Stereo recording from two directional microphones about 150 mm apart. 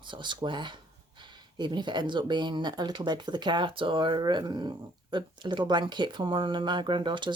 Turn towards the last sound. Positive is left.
turn(degrees=-30)  # may be behind; listen again after turning